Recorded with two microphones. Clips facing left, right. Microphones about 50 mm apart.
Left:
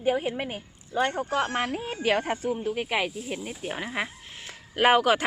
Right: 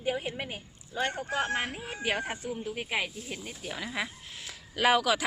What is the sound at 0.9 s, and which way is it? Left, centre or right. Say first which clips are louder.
Speech: left 6 dB; left.